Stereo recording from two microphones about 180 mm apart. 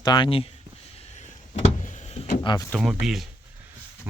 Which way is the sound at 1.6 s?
40° left (ahead or behind).